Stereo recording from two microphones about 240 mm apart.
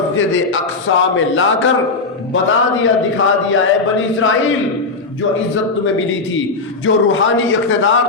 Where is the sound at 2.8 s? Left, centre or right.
Left.